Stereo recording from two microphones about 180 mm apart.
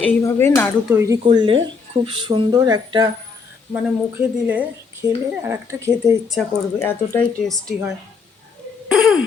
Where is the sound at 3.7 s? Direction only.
10° right (ahead or behind).